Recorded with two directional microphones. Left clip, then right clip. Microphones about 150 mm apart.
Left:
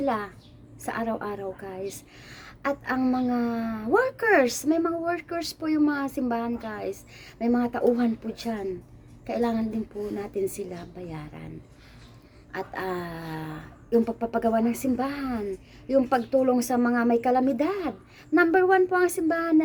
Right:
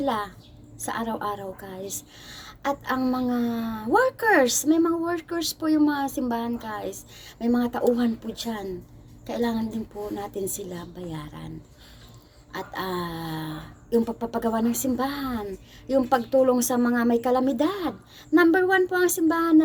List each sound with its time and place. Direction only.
0.0 s a woman's voice: 15° left (ahead or behind)